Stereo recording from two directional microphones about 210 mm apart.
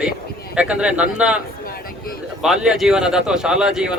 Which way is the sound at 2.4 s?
5° right (ahead or behind).